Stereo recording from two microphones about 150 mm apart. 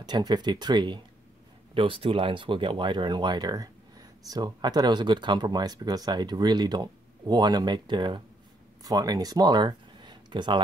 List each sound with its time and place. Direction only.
0.0 s speech: 30° right (ahead or behind)